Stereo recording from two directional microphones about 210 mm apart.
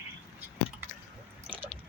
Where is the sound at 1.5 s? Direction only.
25° right (ahead or behind).